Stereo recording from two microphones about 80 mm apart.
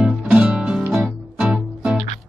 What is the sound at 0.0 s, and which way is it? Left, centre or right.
Music, centre.